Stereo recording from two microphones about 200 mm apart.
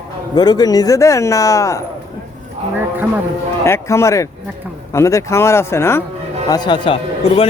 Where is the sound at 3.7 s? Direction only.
15° left (ahead or behind).